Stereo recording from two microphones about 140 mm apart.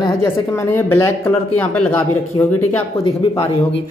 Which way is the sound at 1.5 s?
10° left (ahead or behind).